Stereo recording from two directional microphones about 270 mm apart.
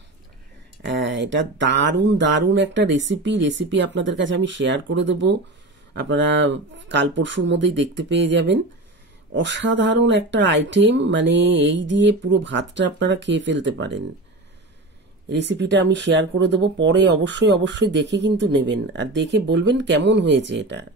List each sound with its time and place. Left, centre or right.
0.8 s speech: right
15.2 s speech: right